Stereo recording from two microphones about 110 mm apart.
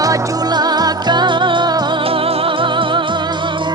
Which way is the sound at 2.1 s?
60° right (ahead or behind).